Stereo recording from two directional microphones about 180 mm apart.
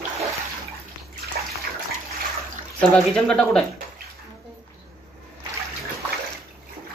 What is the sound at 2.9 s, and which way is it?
Speech, 5° left (ahead or behind).